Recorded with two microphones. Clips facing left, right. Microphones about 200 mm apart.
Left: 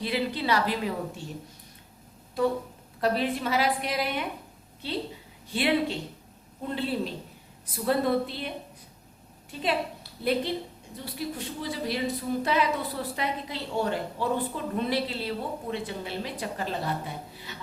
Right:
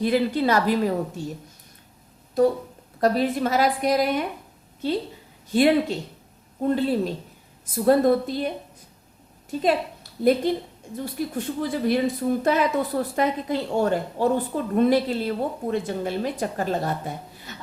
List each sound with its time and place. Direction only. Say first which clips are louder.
0.0 s a woman's voice: right 8 dB; 45° right (ahead or behind)
3.0 s a woman's voice: right 5 dB; 45° right (ahead or behind)